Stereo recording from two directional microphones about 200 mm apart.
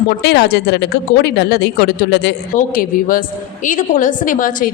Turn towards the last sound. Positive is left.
turn(degrees=40)  # may be behind; listen again after turning